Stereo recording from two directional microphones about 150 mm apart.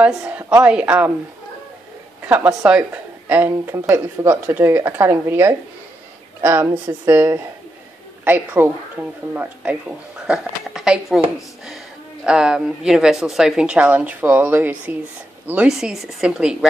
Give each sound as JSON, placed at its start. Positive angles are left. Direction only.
{"t": 0.0, "sound": "speech", "side_deg": -10}
{"t": 2.2, "sound": "speech", "side_deg": -10}